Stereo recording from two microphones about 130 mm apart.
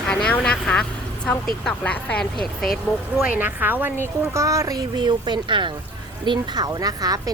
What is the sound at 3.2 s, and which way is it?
A woman's voice, 15° right (ahead or behind).